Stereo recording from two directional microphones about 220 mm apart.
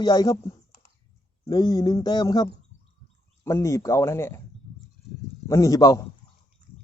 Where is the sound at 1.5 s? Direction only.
20° left (ahead or behind).